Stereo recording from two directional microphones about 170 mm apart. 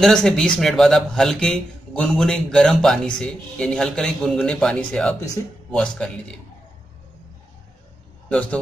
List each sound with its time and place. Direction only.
0.0 s a man's voice: centre (ahead or behind)
8.3 s a man's voice: 5° left (ahead or behind)